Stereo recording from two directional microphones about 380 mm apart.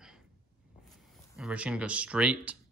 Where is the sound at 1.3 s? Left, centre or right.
Centre.